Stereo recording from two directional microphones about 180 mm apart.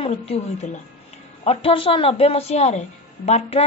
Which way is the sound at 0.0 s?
35° left (ahead or behind).